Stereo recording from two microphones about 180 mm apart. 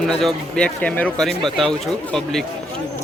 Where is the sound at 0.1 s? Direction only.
Centre (ahead or behind).